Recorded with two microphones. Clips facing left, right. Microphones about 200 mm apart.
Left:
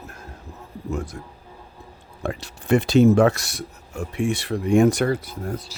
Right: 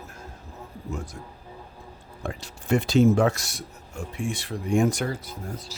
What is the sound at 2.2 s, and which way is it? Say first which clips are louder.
A man's voice: left 4 dB; 65° left (ahead or behind).